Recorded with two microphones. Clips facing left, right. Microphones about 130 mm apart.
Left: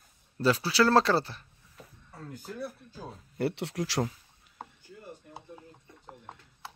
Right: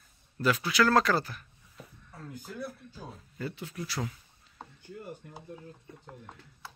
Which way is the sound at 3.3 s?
75° left (ahead or behind).